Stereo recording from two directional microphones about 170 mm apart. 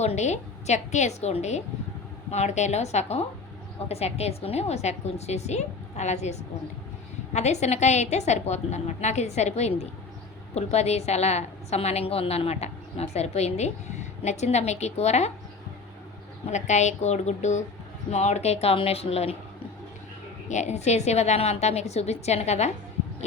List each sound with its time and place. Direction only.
0.0 s a woman's voice: 40° left (ahead or behind)
16.5 s a woman's voice: 45° left (ahead or behind)
20.5 s a woman's voice: 45° left (ahead or behind)